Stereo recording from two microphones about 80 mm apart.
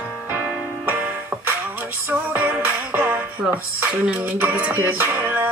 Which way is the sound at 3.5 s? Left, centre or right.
Centre.